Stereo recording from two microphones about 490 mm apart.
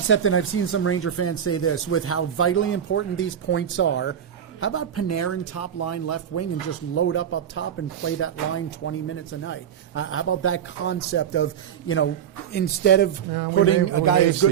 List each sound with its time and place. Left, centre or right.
0.1 s a man's voice: left